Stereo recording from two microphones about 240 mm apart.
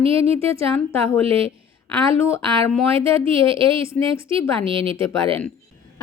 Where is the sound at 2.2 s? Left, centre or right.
Centre.